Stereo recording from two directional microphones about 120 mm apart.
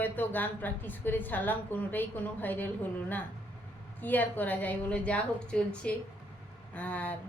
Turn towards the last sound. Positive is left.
turn(degrees=10)  # may be behind; listen again after turning